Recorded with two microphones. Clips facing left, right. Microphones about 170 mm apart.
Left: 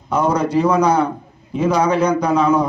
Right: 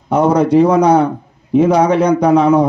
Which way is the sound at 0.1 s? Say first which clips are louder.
Right 6 dB; 65° right (ahead or behind).